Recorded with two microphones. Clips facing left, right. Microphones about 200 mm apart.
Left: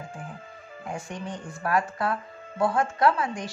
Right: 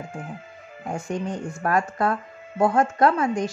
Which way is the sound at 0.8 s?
45° right (ahead or behind).